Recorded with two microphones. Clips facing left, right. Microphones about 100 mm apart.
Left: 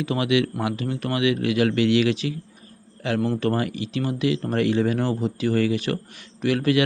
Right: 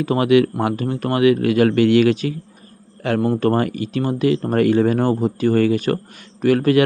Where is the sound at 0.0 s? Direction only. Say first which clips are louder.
Right 7 dB; 45° right (ahead or behind).